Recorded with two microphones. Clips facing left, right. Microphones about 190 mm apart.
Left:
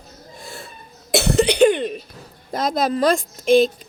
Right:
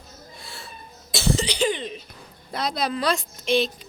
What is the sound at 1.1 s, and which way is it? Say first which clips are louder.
Cough: left 8 dB; 65° left (ahead or behind).